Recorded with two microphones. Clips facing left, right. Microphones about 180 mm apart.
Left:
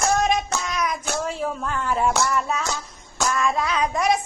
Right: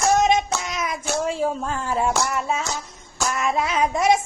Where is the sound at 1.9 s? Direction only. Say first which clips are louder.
Even; 30° right (ahead or behind).